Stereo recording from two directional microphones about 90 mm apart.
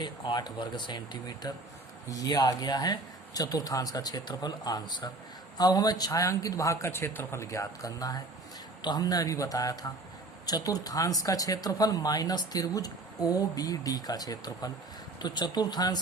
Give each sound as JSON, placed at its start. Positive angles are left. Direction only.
{"t": 0.0, "sound": "a man's voice", "side_deg": 55}